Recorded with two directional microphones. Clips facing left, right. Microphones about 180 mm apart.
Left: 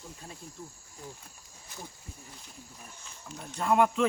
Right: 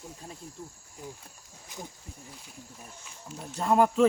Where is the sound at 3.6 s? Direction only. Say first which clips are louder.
Right 1 dB; 35° right (ahead or behind).